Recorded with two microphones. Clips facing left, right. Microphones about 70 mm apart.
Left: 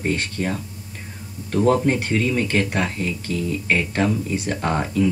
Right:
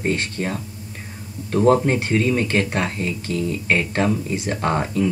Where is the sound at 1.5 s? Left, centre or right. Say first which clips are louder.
Right 2 dB; centre.